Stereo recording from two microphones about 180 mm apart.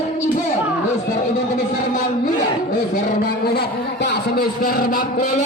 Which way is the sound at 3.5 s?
70° left (ahead or behind).